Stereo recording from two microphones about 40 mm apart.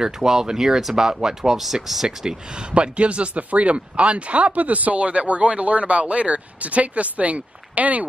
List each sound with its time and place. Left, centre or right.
0.0 s speech: centre
2.0 s speech: right